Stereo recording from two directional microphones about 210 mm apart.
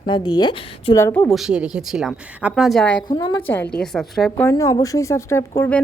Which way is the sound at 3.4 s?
10° left (ahead or behind).